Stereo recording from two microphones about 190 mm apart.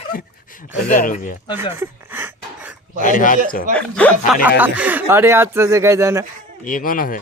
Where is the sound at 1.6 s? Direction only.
10° right (ahead or behind).